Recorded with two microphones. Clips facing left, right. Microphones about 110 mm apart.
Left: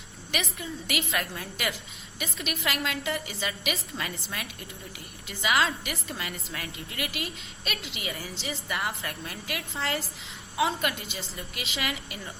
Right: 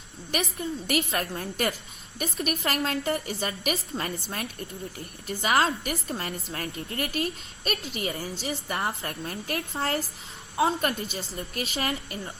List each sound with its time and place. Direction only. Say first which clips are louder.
0.3 s a woman's voice: right 4 dB; 40° right (ahead or behind)